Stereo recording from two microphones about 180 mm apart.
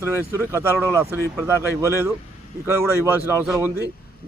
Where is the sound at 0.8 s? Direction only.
15° right (ahead or behind).